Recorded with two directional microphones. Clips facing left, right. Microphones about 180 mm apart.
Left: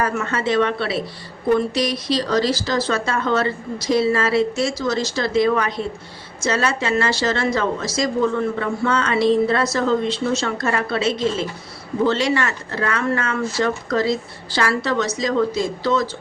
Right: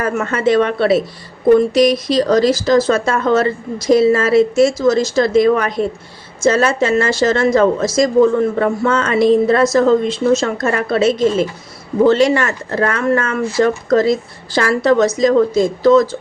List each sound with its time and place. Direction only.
0.0 s speech: 50° right (ahead or behind)